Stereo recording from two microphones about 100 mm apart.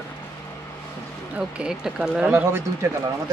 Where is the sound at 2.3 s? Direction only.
25° right (ahead or behind).